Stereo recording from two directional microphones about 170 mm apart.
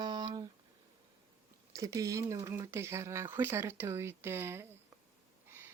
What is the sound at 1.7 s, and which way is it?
Speech, 20° right (ahead or behind).